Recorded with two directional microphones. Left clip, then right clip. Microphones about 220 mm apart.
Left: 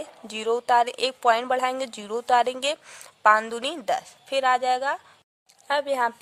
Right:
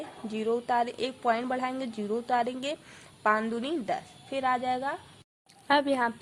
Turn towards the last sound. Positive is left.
turn(degrees=35)  # may be behind; listen again after turning